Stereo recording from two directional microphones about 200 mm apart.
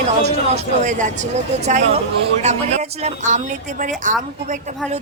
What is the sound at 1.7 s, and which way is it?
A woman's voice, 35° right (ahead or behind).